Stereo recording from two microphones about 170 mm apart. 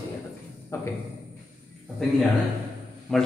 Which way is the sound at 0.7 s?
15° left (ahead or behind).